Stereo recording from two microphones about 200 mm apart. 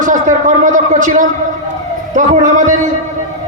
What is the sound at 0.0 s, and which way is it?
A man's voice, 40° right (ahead or behind).